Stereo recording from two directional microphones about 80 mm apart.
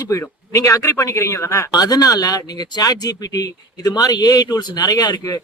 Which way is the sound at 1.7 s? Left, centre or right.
Left.